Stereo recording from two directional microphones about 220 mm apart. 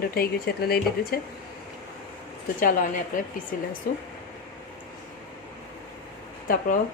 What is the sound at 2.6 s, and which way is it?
Speech, 40° left (ahead or behind).